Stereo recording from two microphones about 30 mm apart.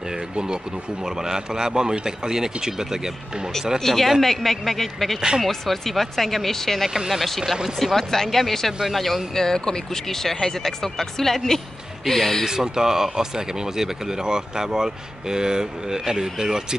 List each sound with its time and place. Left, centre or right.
1.0 s speech: centre
3.8 s speech: centre
7.8 s speech: centre
9.3 s speech: centre
12.4 s speech: right